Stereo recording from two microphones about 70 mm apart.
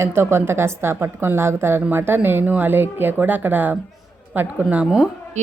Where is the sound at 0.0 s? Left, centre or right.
Right; by 4.9 s centre.